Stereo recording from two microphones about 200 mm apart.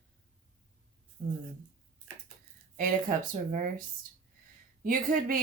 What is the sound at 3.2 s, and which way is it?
Speech, 40° right (ahead or behind).